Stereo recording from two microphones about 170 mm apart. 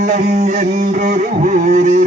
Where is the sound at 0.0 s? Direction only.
45° right (ahead or behind).